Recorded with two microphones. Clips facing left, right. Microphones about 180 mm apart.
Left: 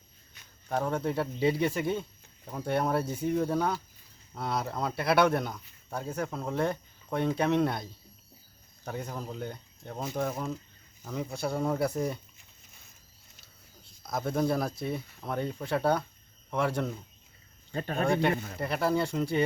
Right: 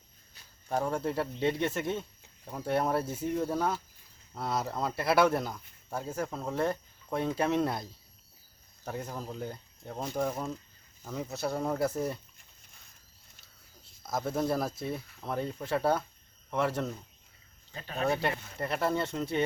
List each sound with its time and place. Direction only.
0.7 s speech: 5° right (ahead or behind)
14.0 s speech: 5° right (ahead or behind)
18.0 s speech: 5° right (ahead or behind)